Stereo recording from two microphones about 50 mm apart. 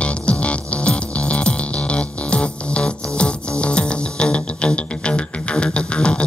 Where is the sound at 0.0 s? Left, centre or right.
Left.